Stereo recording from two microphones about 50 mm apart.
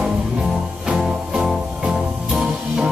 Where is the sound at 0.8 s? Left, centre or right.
Centre.